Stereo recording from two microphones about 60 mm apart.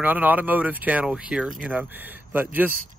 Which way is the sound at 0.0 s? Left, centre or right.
Right.